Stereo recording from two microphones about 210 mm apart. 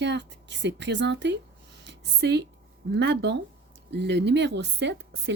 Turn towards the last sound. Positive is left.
turn(degrees=-55)  # may be behind; listen again after turning